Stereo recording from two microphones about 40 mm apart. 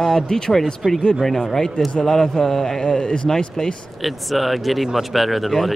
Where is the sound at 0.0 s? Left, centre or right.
Centre.